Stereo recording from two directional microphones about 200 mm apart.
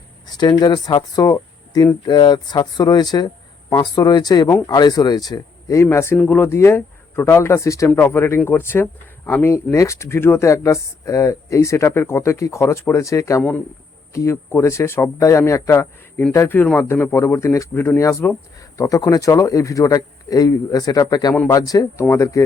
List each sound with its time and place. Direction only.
0.3 s speech: 20° left (ahead or behind)